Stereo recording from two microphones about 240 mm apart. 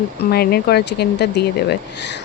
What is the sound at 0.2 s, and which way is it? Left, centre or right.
Speech, left.